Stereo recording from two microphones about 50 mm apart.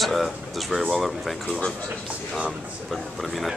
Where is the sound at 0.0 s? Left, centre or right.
Centre.